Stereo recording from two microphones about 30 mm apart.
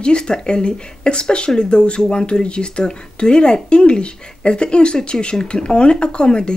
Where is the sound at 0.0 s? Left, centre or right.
Left.